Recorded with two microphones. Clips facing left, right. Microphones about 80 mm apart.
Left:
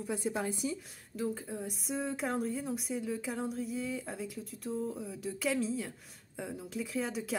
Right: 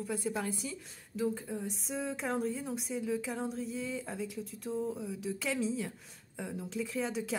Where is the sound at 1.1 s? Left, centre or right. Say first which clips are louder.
Right 2 dB; centre.